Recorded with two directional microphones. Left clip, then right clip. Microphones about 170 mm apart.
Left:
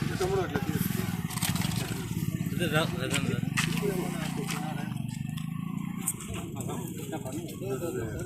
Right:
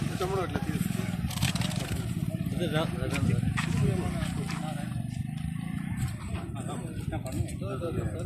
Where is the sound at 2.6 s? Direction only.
20° right (ahead or behind).